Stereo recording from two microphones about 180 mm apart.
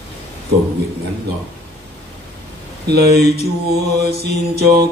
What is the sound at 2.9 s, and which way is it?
Mantra, 60° right (ahead or behind).